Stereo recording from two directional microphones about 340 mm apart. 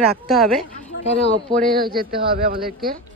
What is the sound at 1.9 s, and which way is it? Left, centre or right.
Speech, right.